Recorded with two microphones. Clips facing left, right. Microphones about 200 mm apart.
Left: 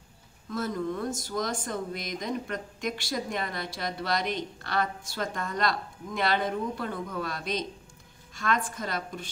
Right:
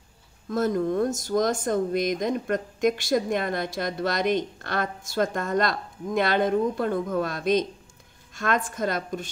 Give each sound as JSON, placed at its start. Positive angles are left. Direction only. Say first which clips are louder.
{"t": 0.5, "sound": "speech", "louder": "right 7 dB", "side_deg": -45}